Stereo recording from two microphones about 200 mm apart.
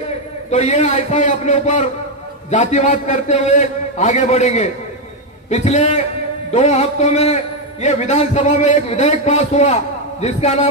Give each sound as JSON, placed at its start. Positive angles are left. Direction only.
{"t": 0.5, "sound": "a man's voice", "side_deg": 35}